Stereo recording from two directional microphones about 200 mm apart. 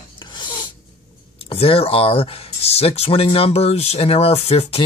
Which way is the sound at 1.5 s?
30° left (ahead or behind).